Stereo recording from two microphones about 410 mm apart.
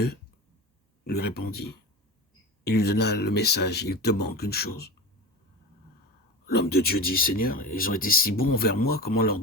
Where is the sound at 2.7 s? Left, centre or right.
Left.